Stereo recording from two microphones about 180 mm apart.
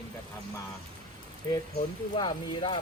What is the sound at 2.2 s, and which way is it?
Speech, 30° left (ahead or behind).